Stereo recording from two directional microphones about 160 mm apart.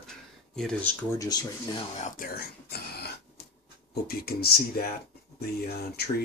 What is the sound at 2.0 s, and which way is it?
Speech, 65° left (ahead or behind).